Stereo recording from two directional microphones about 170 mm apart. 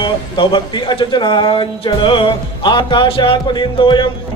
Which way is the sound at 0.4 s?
25° left (ahead or behind).